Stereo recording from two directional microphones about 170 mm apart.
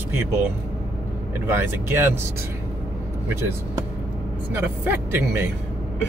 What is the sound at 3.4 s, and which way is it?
Speech, 15° right (ahead or behind).